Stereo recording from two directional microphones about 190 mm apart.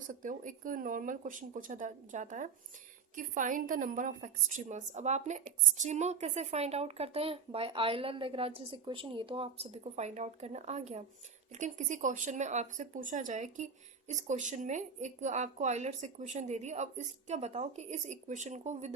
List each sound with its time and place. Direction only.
0.1 s a woman's voice: 45° right (ahead or behind)